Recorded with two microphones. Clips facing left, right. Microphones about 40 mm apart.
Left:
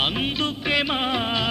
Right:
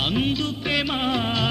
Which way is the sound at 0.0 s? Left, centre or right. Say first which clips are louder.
Even; centre.